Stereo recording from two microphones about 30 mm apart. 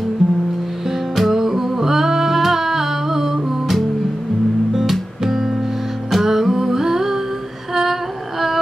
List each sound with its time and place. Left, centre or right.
0.2 s music: centre
1.3 s humming: centre
5.2 s music: centre
7.7 s a sound: centre